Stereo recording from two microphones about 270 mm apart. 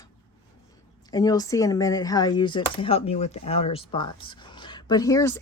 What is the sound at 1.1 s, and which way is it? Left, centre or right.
Speech, centre.